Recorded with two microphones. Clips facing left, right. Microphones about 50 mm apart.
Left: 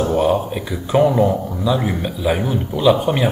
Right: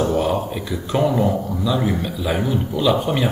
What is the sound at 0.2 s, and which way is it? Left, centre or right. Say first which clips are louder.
Speech: left 4 dB; left.